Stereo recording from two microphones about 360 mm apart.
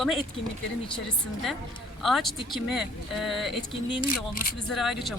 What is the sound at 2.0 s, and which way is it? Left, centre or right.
Speech, centre.